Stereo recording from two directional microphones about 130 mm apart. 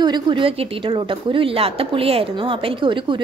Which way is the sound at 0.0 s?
35° right (ahead or behind).